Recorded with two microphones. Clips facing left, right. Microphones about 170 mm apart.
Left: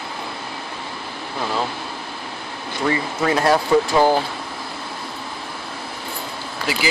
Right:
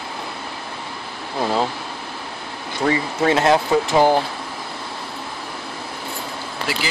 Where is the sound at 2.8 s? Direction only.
40° right (ahead or behind).